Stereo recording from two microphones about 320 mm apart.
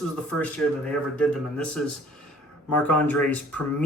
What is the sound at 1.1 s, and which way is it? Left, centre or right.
Speech, centre.